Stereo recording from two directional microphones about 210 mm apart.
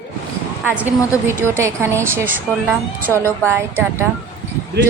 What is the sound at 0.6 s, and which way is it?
A woman's voice, 5° right (ahead or behind).